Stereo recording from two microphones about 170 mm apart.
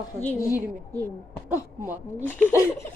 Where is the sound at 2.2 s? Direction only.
10° left (ahead or behind).